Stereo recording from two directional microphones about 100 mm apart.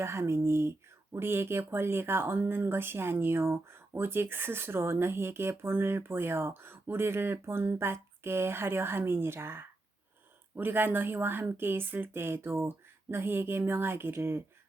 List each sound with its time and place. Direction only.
0.0 s speech: 25° right (ahead or behind)